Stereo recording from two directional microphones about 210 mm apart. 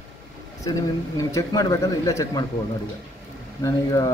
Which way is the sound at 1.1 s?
15° left (ahead or behind).